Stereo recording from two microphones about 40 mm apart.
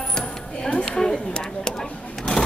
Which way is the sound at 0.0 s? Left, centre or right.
Centre.